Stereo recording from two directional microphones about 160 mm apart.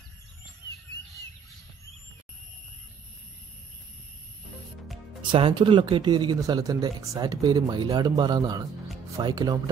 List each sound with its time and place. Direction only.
5.2 s speech: 30° right (ahead or behind)